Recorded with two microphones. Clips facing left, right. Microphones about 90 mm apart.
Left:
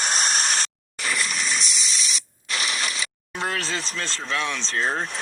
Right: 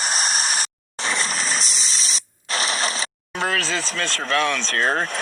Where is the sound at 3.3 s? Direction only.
90° right; by 5.2 s 70° right (ahead or behind).